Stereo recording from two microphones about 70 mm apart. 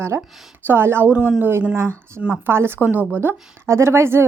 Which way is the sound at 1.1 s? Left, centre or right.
Centre.